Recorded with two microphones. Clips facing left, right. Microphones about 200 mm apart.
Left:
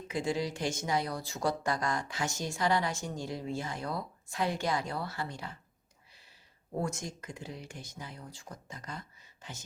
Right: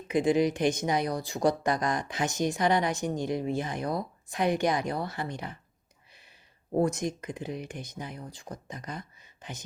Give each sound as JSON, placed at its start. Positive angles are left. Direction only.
{"t": 0.1, "sound": "speech", "side_deg": -20}
{"t": 6.7, "sound": "speech", "side_deg": -20}